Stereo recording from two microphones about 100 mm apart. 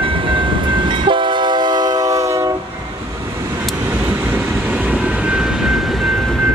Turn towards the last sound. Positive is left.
turn(degrees=5)  # may be behind; listen again after turning